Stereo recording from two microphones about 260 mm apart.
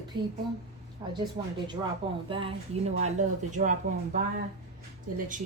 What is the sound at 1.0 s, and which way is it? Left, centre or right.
Speech, centre.